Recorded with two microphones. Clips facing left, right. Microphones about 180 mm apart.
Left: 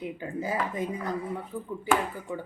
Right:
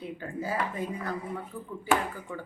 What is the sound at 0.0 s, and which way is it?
A woman's voice, 15° left (ahead or behind).